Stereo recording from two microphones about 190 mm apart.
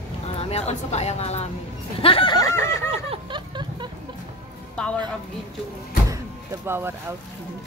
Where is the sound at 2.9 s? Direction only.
30° right (ahead or behind).